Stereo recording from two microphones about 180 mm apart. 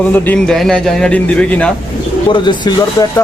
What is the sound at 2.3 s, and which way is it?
Speech, 25° left (ahead or behind).